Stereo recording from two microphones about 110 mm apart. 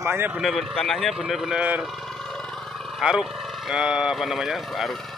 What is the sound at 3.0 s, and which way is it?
Speech, 5° right (ahead or behind).